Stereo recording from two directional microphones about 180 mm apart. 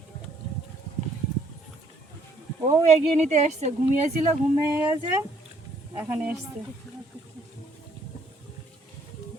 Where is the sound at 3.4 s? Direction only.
40° right (ahead or behind).